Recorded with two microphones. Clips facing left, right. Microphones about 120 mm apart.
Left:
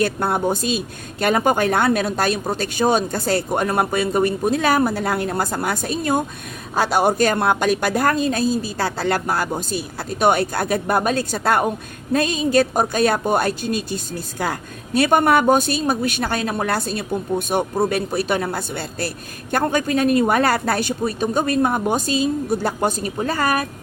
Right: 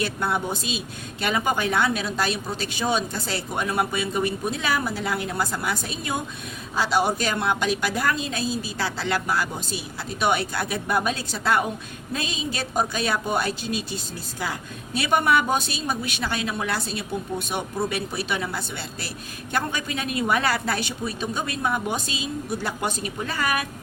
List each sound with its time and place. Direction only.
0.0 s a woman's voice: 45° left (ahead or behind)